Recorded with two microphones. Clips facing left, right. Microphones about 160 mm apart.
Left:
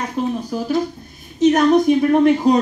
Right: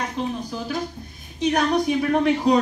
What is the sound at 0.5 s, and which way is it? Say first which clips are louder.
Speech: left 8 dB; 45° left (ahead or behind).